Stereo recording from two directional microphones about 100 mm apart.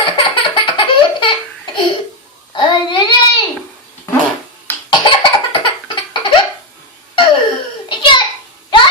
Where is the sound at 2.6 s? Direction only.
50° left (ahead or behind).